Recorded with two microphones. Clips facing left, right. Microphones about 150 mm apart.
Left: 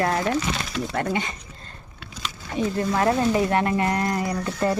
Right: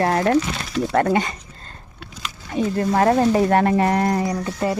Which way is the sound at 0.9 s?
55° right (ahead or behind).